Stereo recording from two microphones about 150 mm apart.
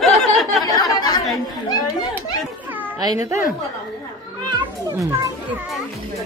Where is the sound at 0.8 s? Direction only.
25° left (ahead or behind).